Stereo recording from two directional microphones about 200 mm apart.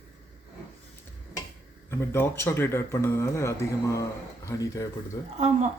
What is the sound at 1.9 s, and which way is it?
Speech, 10° left (ahead or behind).